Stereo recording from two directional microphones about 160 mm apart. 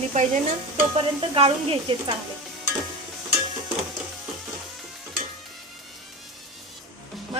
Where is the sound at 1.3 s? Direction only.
35° right (ahead or behind).